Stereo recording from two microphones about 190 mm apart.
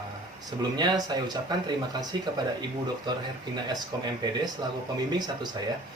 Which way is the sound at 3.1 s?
20° right (ahead or behind).